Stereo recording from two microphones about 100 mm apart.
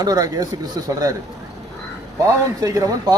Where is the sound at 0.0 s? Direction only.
40° right (ahead or behind).